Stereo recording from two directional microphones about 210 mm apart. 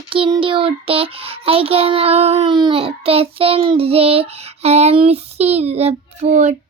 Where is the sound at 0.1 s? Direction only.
25° right (ahead or behind).